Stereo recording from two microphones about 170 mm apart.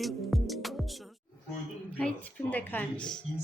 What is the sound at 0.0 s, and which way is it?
Music, centre (ahead or behind).